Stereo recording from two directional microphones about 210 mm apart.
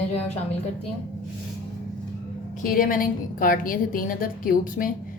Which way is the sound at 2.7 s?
40° left (ahead or behind).